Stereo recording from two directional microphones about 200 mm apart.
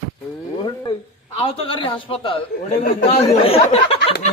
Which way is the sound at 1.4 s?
25° left (ahead or behind).